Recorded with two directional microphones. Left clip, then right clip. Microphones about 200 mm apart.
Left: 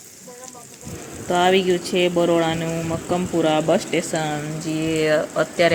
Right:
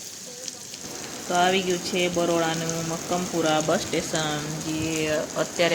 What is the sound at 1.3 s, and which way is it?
Speech, 15° left (ahead or behind).